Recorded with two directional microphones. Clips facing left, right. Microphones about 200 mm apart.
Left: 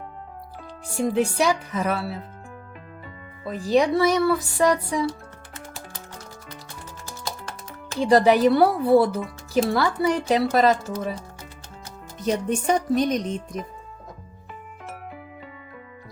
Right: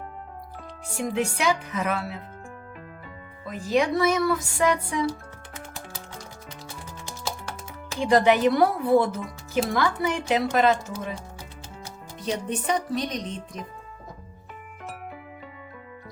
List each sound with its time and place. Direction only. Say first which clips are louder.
1.0 s speech: left 4 dB; 35° left (ahead or behind)
3.4 s speech: left 3 dB; 35° left (ahead or behind)
8.0 s speech: left 3 dB; 35° left (ahead or behind)
12.2 s speech: left 5 dB; 45° left (ahead or behind)